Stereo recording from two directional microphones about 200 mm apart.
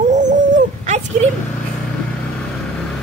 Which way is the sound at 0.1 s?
40° right (ahead or behind).